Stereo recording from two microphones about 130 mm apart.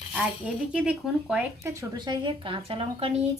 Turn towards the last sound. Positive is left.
turn(degrees=-45)  # may be behind; listen again after turning